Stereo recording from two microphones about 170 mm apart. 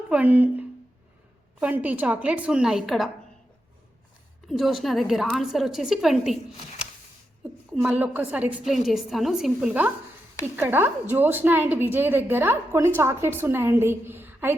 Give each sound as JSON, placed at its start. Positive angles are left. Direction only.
{"t": 0.1, "sound": "a woman's voice", "side_deg": -10}
{"t": 4.4, "sound": "a woman's voice", "side_deg": 0}
{"t": 7.7, "sound": "a woman's voice", "side_deg": -5}